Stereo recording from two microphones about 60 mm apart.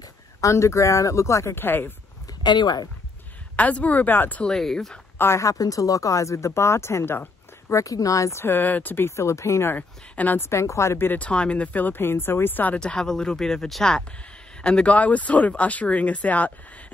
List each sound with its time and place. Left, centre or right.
0.4 s speech: left
3.5 s speech: left
4.4 s speech: centre
5.1 s a sound: left
5.4 s speech: left
7.7 s speech: left
8.5 s speech: left
9.1 s speech: left
9.8 s speech: left
10.4 s speech: left
11.1 s speech: centre
12.7 s speech: centre
14.6 s speech: centre